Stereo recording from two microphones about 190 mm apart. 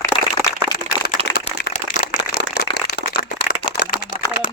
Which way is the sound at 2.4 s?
60° left (ahead or behind).